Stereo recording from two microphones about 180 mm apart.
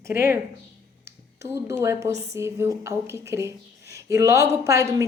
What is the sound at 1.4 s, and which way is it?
A woman's voice, 15° right (ahead or behind).